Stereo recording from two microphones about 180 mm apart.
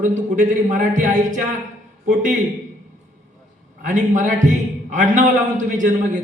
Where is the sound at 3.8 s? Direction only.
45° right (ahead or behind).